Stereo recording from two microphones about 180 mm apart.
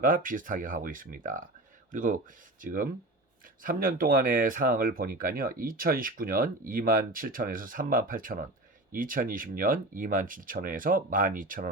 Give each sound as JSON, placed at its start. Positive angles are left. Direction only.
{"t": 0.0, "sound": "speech", "side_deg": -50}